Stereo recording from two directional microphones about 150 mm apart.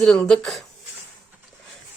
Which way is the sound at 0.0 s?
5° left (ahead or behind).